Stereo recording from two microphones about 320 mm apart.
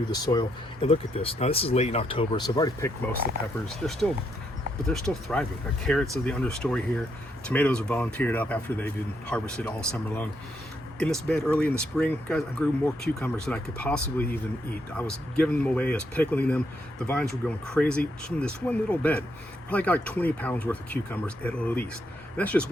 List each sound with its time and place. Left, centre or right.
0.1 s speech: centre
3.8 s speech: centre